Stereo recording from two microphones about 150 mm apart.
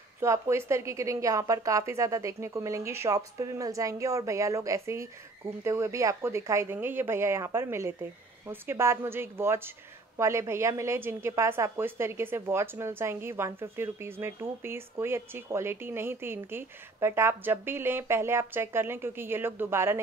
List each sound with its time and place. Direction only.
0.2 s a woman's voice: 20° right (ahead or behind)